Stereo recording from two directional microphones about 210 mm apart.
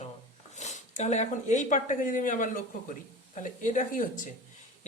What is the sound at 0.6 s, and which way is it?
Speech, 35° left (ahead or behind).